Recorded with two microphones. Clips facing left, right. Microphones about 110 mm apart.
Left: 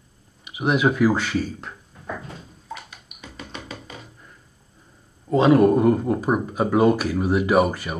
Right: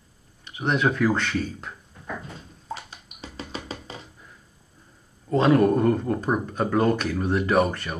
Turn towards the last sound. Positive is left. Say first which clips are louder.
# left 3 dB
turn(degrees=5)  # may be behind; listen again after turning